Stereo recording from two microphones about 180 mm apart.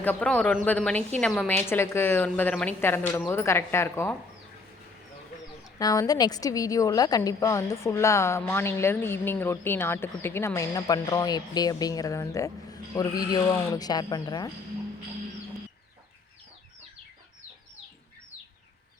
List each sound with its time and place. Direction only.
0.0 s a woman's voice: 10° left (ahead or behind)
5.8 s a woman's voice: 20° left (ahead or behind)